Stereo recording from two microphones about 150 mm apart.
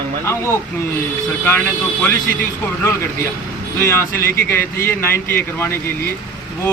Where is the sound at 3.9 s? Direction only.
15° left (ahead or behind).